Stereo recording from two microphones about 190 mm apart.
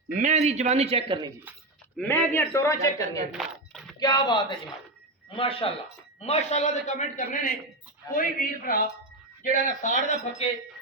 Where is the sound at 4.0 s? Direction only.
25° left (ahead or behind).